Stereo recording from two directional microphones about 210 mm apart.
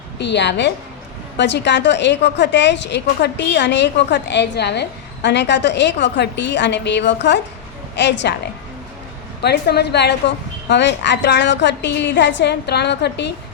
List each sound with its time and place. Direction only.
0.2 s a woman's voice: 55° left (ahead or behind)
9.4 s a woman's voice: 50° left (ahead or behind)